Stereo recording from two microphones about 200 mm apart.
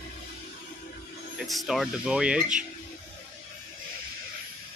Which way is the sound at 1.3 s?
Centre (ahead or behind).